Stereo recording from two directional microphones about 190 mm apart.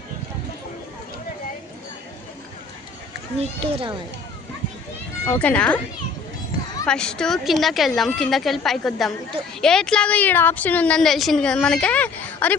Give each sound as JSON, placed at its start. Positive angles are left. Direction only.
{"t": 3.3, "sound": "a child's voice", "side_deg": -30}
{"t": 5.2, "sound": "a woman's voice", "side_deg": 10}
{"t": 6.8, "sound": "a woman's voice", "side_deg": 5}